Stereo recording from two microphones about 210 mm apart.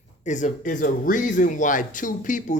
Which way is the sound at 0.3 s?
35° left (ahead or behind).